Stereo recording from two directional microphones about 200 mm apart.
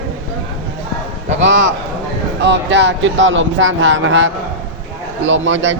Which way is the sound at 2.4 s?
60° right (ahead or behind).